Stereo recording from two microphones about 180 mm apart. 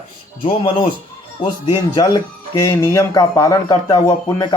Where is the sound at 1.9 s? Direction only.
20° left (ahead or behind).